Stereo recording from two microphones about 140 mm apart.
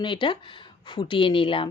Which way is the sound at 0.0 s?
35° left (ahead or behind).